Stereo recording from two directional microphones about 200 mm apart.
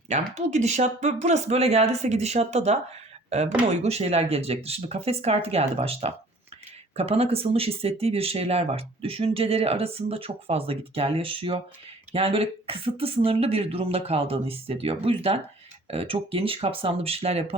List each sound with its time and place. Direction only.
0.3 s speech: 35° right (ahead or behind)